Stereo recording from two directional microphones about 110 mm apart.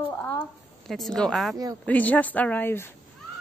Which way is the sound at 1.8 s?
15° left (ahead or behind).